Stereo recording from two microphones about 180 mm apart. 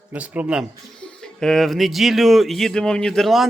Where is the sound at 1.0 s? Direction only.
5° left (ahead or behind).